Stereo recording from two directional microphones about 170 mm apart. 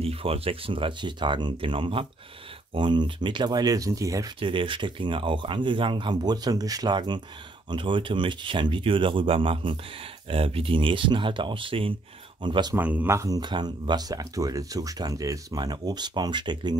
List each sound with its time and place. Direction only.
0.0 s speech: 35° right (ahead or behind); by 4.3 s 20° right (ahead or behind)
4.4 s speech: 30° right (ahead or behind)
12.7 s speech: 10° right (ahead or behind); by 16.7 s 25° right (ahead or behind)